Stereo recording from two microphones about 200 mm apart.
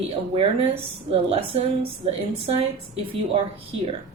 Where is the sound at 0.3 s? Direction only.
30° right (ahead or behind).